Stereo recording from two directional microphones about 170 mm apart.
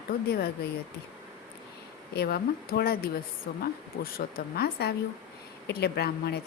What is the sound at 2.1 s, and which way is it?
A woman's voice, 65° left (ahead or behind).